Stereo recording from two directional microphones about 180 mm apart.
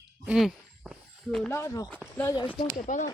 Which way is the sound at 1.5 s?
15° left (ahead or behind).